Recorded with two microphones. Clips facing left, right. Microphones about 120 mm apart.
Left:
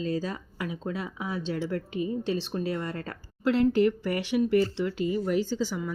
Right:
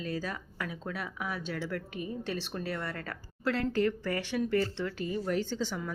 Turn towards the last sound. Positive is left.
turn(degrees=5)  # may be behind; listen again after turning